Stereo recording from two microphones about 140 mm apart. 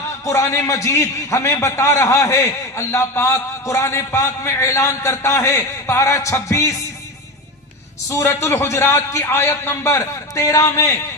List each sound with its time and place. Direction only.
0.3 s a man's voice: 20° left (ahead or behind)
8.1 s a man's voice: 20° left (ahead or behind)